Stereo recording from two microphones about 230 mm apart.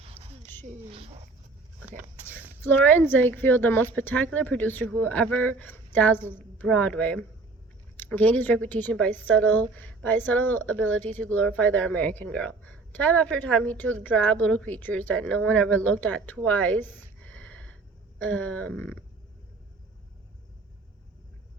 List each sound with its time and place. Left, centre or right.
0.2 s a sound: centre
0.6 s speech: right
2.6 s a woman's voice: centre